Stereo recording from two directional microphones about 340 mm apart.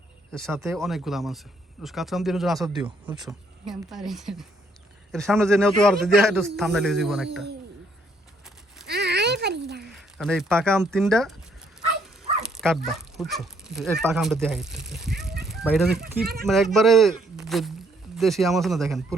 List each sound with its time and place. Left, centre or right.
0.3 s speech: centre
8.9 s a sound: right
10.2 s speech: centre
12.5 s speech: centre